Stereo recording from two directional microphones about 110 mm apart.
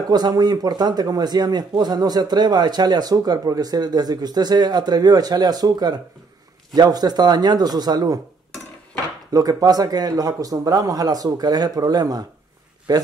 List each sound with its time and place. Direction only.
0.1 s speech: 35° right (ahead or behind)
9.3 s speech: 35° right (ahead or behind)